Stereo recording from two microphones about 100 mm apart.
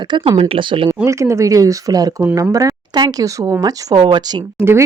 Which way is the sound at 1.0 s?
30° right (ahead or behind).